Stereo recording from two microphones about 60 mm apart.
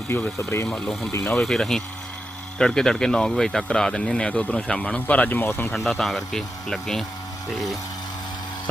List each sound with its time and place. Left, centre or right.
0.1 s speech: left
0.7 s speech: centre; by 5.7 s left
5.7 s speech: centre